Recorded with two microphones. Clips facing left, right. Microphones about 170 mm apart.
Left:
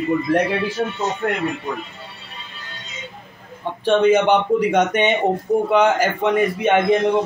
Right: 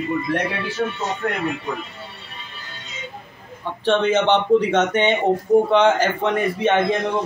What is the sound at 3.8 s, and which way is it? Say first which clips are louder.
Speech: left 3 dB; 15° left (ahead or behind).